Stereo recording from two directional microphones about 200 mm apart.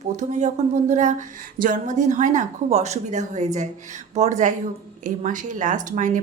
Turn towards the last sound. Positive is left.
turn(degrees=-40)  # may be behind; listen again after turning